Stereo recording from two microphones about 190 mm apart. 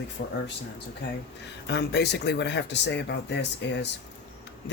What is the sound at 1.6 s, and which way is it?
Speech, 65° left (ahead or behind).